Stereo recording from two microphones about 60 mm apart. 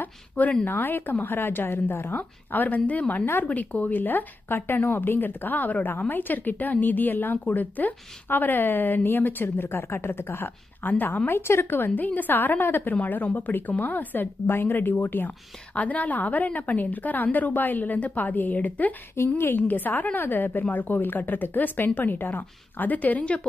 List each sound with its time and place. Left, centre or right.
0.0 s a woman's voice: left
3.4 s speech: centre
3.8 s a woman's voice: left